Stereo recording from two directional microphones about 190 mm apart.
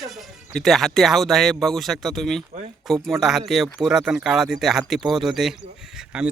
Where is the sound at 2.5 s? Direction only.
35° right (ahead or behind).